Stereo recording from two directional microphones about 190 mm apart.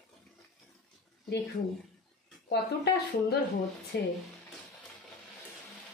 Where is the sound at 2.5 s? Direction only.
60° left (ahead or behind).